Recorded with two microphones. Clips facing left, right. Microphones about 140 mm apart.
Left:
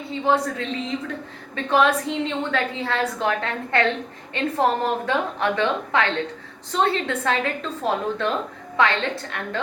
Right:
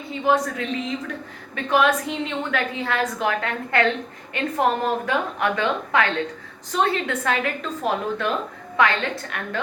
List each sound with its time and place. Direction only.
0.1 s a woman's voice: 30° left (ahead or behind)